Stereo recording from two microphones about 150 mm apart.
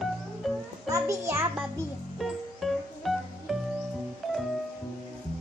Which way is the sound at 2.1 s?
Centre (ahead or behind).